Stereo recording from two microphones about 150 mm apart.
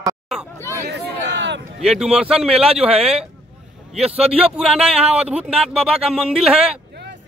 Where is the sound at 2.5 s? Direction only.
40° right (ahead or behind).